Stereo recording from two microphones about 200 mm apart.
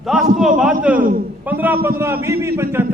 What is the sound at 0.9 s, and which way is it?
Speech, 45° right (ahead or behind).